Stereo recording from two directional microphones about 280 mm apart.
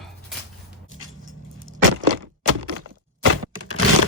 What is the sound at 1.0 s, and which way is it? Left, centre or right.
Vehicle, right.